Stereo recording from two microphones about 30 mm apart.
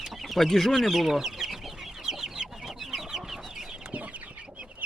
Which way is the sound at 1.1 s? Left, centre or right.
Centre.